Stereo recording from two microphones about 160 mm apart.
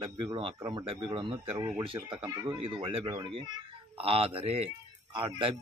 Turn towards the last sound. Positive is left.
turn(degrees=-30)  # may be behind; listen again after turning